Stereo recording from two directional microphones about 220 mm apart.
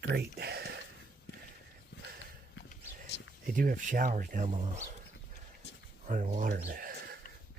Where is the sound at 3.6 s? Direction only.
40° right (ahead or behind).